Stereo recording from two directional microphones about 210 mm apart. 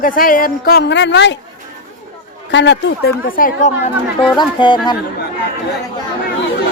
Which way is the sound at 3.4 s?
35° left (ahead or behind).